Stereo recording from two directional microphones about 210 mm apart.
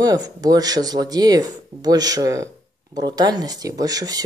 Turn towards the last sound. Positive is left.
turn(degrees=-20)  # may be behind; listen again after turning